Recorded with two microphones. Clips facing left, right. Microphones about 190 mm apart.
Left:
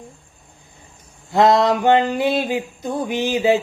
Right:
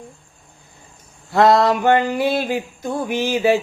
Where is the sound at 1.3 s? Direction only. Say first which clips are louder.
Right 1 dB; 20° left (ahead or behind).